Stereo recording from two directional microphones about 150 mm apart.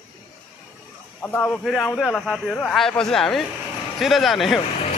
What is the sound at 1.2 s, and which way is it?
A man's voice, 10° left (ahead or behind).